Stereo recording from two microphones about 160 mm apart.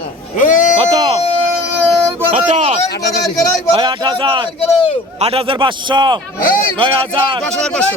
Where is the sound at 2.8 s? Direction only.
90° left.